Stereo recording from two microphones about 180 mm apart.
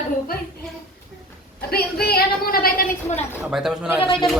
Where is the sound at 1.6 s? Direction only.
60° left (ahead or behind).